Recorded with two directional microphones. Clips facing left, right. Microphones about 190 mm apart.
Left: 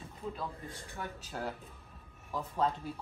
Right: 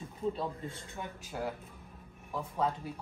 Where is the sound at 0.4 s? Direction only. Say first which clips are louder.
Right 4 dB; 20° right (ahead or behind).